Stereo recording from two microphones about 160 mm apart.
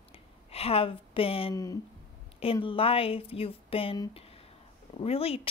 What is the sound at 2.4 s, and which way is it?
A woman's voice, 35° left (ahead or behind).